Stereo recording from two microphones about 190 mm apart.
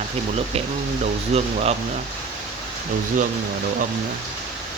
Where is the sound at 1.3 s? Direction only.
35° right (ahead or behind).